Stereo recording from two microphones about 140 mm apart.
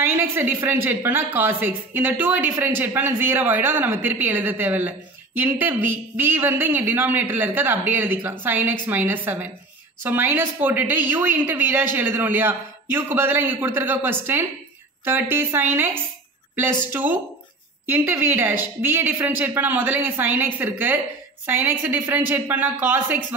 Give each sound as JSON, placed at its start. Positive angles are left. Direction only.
{"t": 0.0, "sound": "a woman's voice", "side_deg": -15}
{"t": 16.9, "sound": "a woman's voice", "side_deg": -15}